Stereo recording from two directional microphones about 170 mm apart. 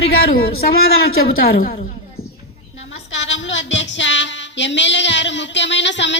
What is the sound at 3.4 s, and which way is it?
Music, 90° left.